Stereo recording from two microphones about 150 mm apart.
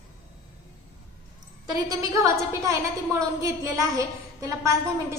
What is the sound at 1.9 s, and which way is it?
A woman's voice, 20° right (ahead or behind).